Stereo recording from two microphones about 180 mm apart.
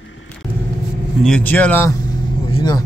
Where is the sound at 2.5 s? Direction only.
25° left (ahead or behind).